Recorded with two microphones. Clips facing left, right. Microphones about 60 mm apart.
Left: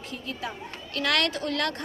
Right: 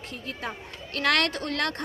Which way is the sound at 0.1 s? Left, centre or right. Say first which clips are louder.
Even; right.